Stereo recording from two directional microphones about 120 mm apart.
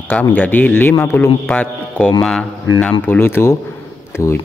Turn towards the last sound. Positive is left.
turn(degrees=20)  # may be behind; listen again after turning